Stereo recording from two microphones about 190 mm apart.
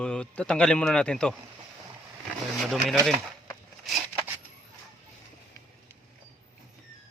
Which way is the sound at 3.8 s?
5° right (ahead or behind).